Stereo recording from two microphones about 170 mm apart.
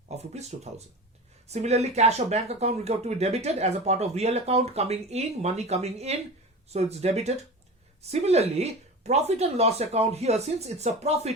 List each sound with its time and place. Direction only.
0.3 s speech: 40° right (ahead or behind)